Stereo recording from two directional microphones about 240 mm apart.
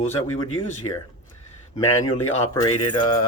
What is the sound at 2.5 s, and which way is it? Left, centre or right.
Speech, centre.